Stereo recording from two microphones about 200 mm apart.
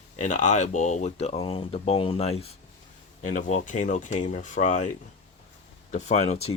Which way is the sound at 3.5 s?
35° left (ahead or behind).